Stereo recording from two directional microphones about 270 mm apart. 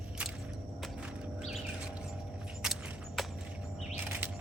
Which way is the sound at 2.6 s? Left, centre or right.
Centre.